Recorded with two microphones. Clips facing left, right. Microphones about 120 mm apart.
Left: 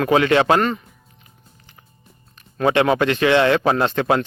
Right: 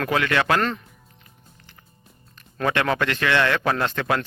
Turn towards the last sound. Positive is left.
turn(degrees=25)  # may be behind; listen again after turning